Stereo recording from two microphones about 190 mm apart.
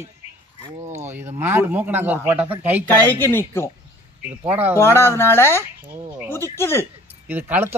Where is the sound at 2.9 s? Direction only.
10° left (ahead or behind).